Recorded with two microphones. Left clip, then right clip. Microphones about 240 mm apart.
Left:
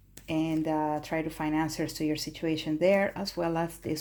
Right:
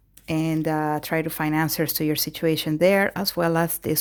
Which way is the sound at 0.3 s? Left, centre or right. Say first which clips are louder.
Right 5 dB; right.